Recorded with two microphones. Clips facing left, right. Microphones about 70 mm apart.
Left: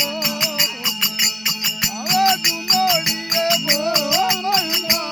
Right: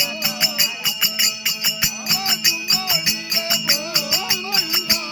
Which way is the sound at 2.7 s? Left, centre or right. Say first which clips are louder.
Left 8 dB; left.